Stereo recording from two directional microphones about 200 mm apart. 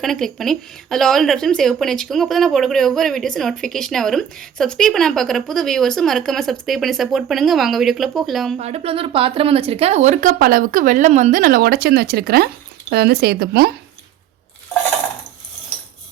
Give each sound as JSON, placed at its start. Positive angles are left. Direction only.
{"t": 0.0, "sound": "speech", "side_deg": 0}
{"t": 8.5, "sound": "speech", "side_deg": -30}